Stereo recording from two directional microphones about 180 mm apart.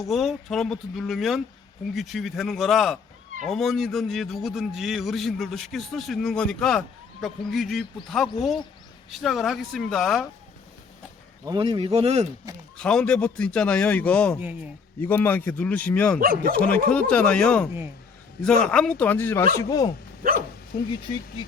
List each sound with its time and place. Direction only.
0.1 s a man's voice: centre (ahead or behind)
11.4 s speech: 25° right (ahead or behind)
12.7 s a man's voice: 5° left (ahead or behind)
16.2 s speech: 55° right (ahead or behind)
16.6 s a man's voice: 5° left (ahead or behind)